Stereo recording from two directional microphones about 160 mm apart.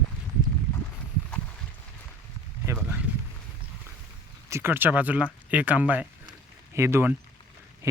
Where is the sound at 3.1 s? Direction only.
10° right (ahead or behind).